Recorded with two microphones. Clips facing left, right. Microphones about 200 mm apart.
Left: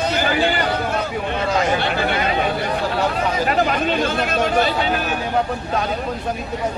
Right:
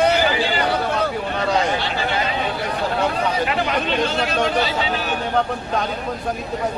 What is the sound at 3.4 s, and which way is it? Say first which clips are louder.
Speech: left 3 dB; 45° left (ahead or behind).